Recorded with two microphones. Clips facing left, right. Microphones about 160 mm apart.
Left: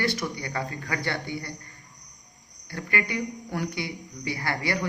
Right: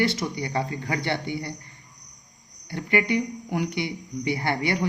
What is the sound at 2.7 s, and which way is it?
A woman's voice, 20° right (ahead or behind).